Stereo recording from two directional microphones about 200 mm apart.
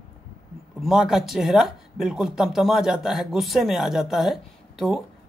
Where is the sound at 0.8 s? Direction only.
Centre (ahead or behind).